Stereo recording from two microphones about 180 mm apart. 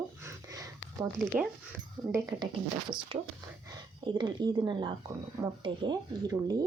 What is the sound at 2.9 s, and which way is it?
Speech, 25° right (ahead or behind).